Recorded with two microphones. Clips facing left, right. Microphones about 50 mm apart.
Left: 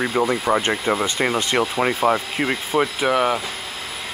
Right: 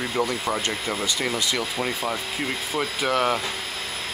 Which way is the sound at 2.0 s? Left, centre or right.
Left.